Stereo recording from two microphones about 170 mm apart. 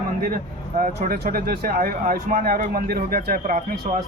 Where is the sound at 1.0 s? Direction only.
65° right (ahead or behind).